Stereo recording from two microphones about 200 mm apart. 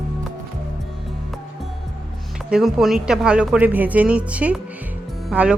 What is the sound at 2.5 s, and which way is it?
Speech, centre (ahead or behind).